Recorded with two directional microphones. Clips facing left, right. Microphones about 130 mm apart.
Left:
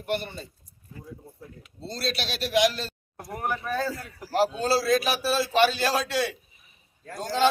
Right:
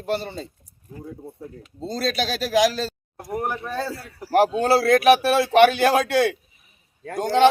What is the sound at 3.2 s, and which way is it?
Speech, 20° right (ahead or behind).